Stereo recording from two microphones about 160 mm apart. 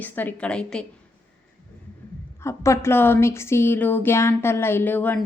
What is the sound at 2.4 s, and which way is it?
A woman's voice, 15° left (ahead or behind).